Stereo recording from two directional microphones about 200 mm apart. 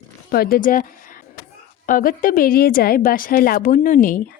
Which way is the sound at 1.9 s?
45° left (ahead or behind).